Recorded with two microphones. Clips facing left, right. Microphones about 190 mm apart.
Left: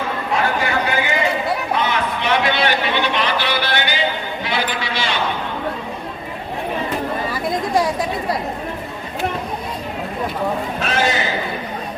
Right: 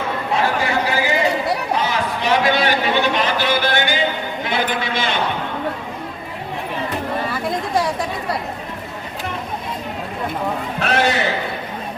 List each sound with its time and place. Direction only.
0.3 s speech: 30° right (ahead or behind)
1.8 s a sound: 35° right (ahead or behind)
4.4 s sheep: 50° right (ahead or behind)
10.8 s a man's voice: 65° right (ahead or behind)